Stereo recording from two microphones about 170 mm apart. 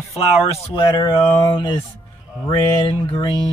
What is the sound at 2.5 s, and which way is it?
Speech, 30° left (ahead or behind).